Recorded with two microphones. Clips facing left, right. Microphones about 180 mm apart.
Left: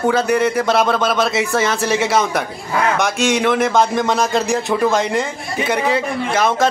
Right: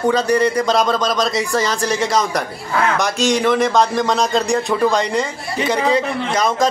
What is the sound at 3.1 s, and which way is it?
Speech, 65° left (ahead or behind).